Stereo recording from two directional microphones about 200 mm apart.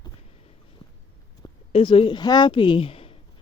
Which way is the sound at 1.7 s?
25° left (ahead or behind).